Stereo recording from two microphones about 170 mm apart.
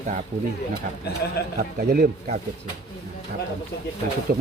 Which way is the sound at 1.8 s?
60° right (ahead or behind).